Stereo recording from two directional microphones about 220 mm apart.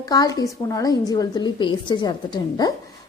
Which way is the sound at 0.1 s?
15° left (ahead or behind).